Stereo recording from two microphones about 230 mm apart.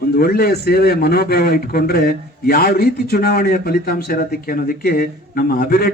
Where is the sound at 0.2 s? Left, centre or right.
Left.